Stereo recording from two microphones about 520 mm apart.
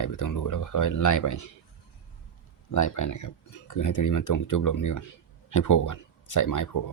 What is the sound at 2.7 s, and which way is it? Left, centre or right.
Speech, left.